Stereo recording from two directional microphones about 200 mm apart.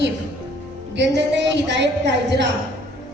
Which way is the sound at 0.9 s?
60° right (ahead or behind).